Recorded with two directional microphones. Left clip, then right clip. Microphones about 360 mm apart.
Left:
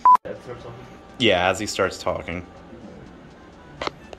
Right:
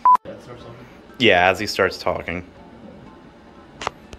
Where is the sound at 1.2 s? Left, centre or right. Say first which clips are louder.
Right 4 dB; centre.